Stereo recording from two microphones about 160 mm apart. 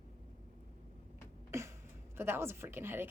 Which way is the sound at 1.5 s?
15° right (ahead or behind).